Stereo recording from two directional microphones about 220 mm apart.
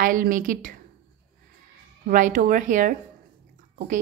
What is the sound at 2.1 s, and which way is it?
Speech, 35° right (ahead or behind).